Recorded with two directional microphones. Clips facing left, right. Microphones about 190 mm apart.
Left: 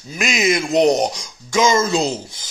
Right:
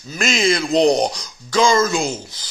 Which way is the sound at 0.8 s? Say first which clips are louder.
Even; 20° left (ahead or behind).